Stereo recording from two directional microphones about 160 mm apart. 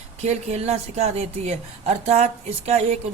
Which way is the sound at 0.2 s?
40° right (ahead or behind).